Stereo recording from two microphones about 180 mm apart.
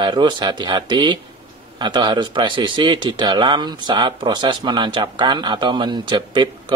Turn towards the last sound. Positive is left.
turn(degrees=-25)  # may be behind; listen again after turning